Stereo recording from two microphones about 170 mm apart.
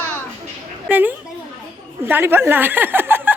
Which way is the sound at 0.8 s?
10° right (ahead or behind).